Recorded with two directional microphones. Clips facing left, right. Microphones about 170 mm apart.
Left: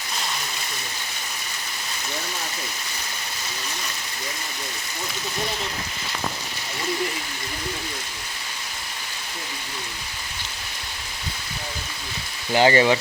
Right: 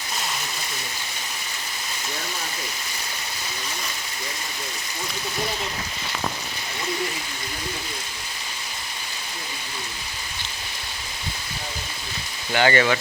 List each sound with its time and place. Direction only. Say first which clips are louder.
12.5 s speech: left 3 dB; 30° left (ahead or behind)